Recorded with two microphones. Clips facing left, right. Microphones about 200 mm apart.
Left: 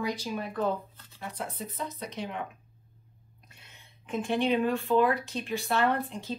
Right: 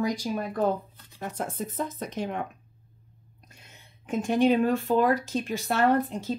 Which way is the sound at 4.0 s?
45° right (ahead or behind).